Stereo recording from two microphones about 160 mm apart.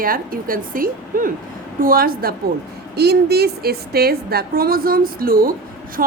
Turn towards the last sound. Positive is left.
turn(degrees=-65)  # may be behind; listen again after turning